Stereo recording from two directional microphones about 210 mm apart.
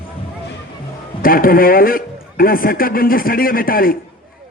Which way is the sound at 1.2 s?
45° left (ahead or behind).